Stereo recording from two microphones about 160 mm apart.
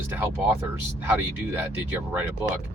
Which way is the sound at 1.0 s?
15° right (ahead or behind).